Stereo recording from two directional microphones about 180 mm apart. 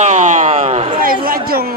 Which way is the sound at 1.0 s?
55° right (ahead or behind).